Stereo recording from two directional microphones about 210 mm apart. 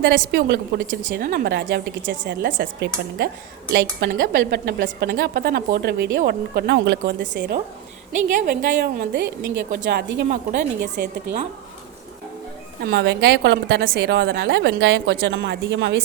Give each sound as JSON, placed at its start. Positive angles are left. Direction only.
{"t": 0.0, "sound": "speech", "side_deg": -45}
{"t": 8.4, "sound": "speech", "side_deg": -40}
{"t": 12.8, "sound": "a woman's voice", "side_deg": -50}